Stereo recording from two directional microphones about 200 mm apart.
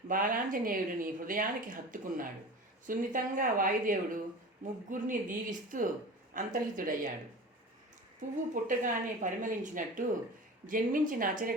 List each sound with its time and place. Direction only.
0.1 s a woman's voice: 45° right (ahead or behind)
8.6 s a woman's voice: 40° right (ahead or behind)